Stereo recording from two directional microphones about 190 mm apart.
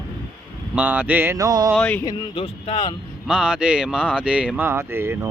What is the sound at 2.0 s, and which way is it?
Speech, 25° left (ahead or behind).